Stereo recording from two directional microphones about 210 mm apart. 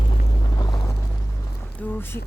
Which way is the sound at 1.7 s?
10° left (ahead or behind).